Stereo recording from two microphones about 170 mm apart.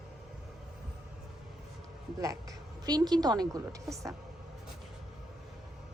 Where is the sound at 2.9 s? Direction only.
25° right (ahead or behind).